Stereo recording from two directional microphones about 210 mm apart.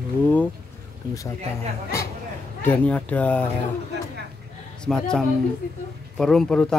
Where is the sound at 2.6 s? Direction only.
5° left (ahead or behind).